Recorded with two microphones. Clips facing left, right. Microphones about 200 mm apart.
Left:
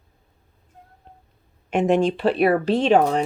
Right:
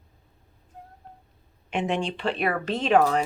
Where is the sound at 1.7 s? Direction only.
45° left (ahead or behind).